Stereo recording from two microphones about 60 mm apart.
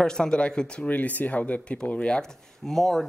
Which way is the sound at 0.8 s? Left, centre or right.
Left.